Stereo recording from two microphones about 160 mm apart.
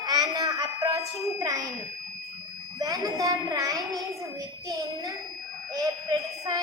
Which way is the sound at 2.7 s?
20° right (ahead or behind).